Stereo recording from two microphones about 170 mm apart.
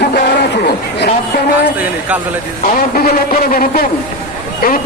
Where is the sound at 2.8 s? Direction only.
55° left (ahead or behind).